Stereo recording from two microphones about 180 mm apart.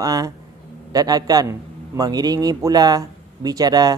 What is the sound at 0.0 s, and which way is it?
A man's voice, 20° right (ahead or behind).